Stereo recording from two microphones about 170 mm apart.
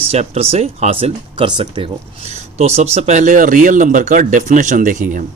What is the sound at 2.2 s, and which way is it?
Speech, 40° right (ahead or behind).